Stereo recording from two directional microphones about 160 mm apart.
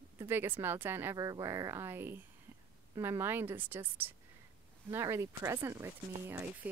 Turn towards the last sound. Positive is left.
turn(degrees=-15)  # may be behind; listen again after turning